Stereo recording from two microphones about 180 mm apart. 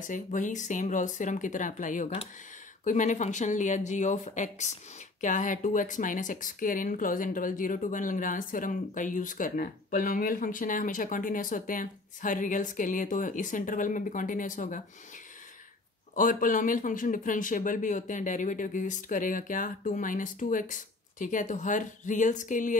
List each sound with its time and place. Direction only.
0.0 s speech: 45° left (ahead or behind)
16.2 s speech: 45° left (ahead or behind)